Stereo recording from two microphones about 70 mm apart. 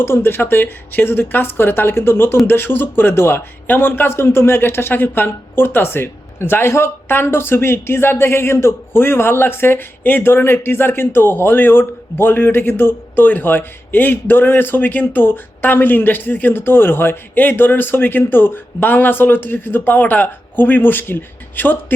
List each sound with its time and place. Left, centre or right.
0.0 s a man's voice: left